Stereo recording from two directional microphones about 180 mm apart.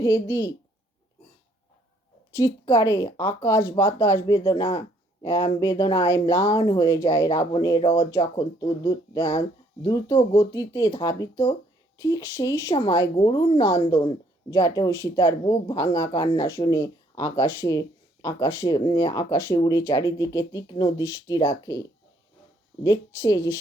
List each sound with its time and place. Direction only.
0.0 s speech: 15° left (ahead or behind)
2.3 s a woman's voice: 15° left (ahead or behind)